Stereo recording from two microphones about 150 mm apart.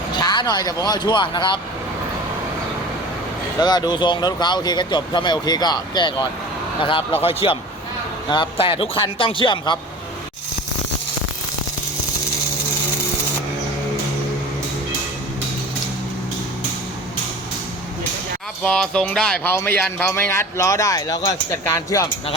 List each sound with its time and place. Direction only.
0.2 s speech: 30° left (ahead or behind)
3.6 s speech: 30° left (ahead or behind)
7.4 s speech: 35° left (ahead or behind)
18.6 s speech: 5° left (ahead or behind); by 22.1 s 20° left (ahead or behind)